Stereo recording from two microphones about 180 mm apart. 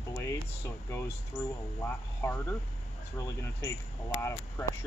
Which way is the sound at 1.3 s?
10° left (ahead or behind).